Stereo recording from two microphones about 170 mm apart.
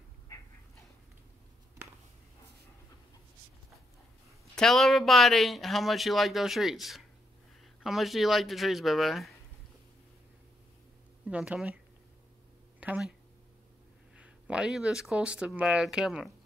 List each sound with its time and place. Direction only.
4.6 s speech: centre (ahead or behind)
11.2 s speech: 5° right (ahead or behind)
12.8 s speech: 10° right (ahead or behind)
14.1 s speech: 5° right (ahead or behind)